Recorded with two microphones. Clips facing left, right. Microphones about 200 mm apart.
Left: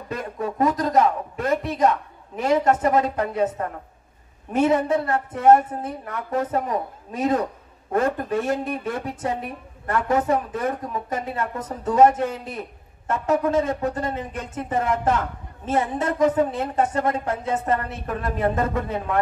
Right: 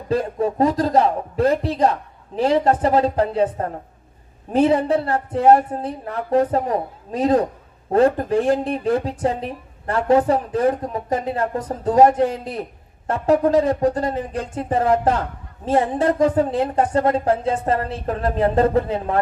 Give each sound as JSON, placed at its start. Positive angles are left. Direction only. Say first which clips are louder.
{"t": 0.1, "sound": "a man's voice", "louder": "right 8 dB", "side_deg": -30}